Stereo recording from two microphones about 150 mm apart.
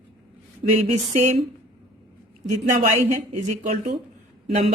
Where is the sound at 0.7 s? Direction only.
50° right (ahead or behind).